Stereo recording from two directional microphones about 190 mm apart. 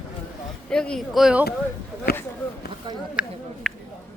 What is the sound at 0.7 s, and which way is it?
Speech, 5° left (ahead or behind).